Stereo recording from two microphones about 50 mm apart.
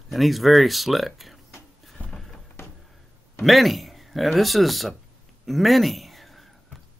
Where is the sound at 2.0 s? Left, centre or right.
Left.